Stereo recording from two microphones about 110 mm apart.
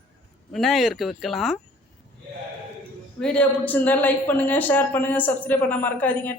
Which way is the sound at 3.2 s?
10° left (ahead or behind).